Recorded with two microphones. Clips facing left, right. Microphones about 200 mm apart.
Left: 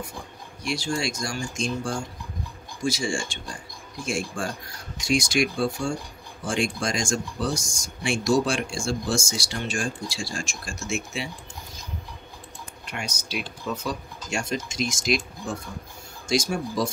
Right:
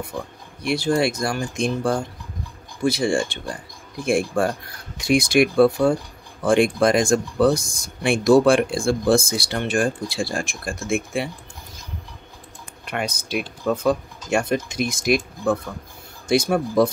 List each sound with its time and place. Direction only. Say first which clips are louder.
0.7 s speech: right 8 dB; 60° right (ahead or behind)
12.8 s speech: right 8 dB; 55° right (ahead or behind)